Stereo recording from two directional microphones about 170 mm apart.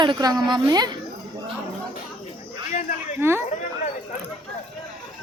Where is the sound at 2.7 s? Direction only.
45° left (ahead or behind).